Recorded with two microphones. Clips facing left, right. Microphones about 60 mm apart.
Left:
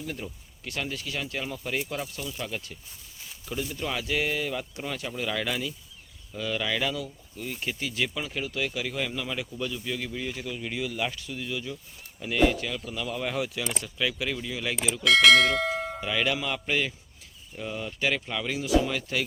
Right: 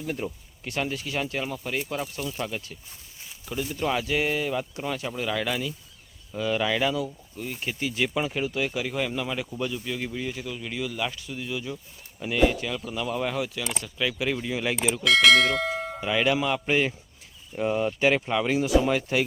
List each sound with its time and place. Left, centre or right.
0.2 s speech: right
0.6 s speech: centre
2.5 s bell: centre
3.2 s speech: centre
6.3 s speech: centre
10.1 s bell: centre
12.2 s speech: centre
13.3 s bell: centre
14.3 s speech: right
15.0 s bell: centre
17.6 s speech: right
18.4 s speech: right
18.9 s speech: right